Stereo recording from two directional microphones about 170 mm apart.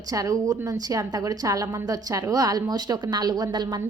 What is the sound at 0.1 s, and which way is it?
A woman's voice, 20° right (ahead or behind).